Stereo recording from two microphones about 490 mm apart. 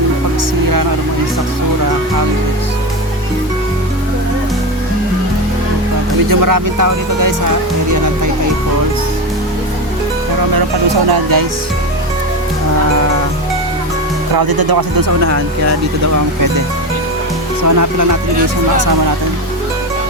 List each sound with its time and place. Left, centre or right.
6.2 s speech: right
11.0 s speech: right
14.3 s speech: right